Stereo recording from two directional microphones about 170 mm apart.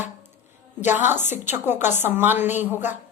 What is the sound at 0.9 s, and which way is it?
A woman's voice, 10° right (ahead or behind).